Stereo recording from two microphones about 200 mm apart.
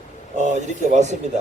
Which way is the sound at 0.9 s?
35° right (ahead or behind).